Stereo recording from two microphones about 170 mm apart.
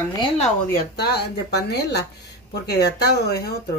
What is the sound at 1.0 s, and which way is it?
Speech, 75° left (ahead or behind).